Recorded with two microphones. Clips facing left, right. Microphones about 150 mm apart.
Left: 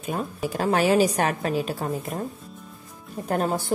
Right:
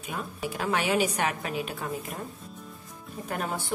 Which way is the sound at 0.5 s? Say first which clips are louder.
Left 6 dB; 40° left (ahead or behind).